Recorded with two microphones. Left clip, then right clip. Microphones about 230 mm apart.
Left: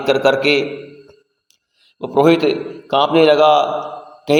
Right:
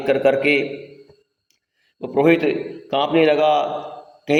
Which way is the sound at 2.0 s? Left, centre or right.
Left.